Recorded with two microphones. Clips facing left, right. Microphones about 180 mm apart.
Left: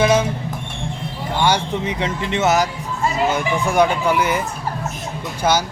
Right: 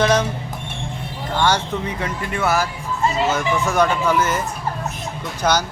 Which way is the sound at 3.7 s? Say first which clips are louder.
Left 3 dB; 15° left (ahead or behind).